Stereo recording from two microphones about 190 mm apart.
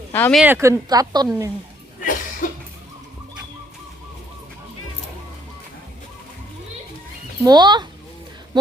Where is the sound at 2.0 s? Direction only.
45° left (ahead or behind).